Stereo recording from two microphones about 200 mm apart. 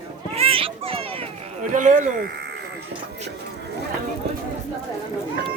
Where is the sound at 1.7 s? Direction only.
40° right (ahead or behind).